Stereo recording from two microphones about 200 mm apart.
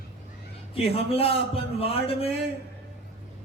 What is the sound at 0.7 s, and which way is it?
A man's voice, 30° left (ahead or behind).